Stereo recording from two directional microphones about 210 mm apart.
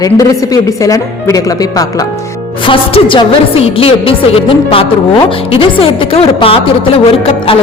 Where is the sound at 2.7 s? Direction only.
25° left (ahead or behind).